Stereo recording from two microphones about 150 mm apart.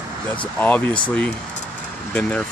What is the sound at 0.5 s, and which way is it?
Speech, 10° left (ahead or behind).